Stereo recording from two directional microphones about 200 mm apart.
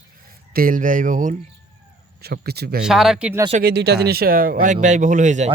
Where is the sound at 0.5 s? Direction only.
45° right (ahead or behind).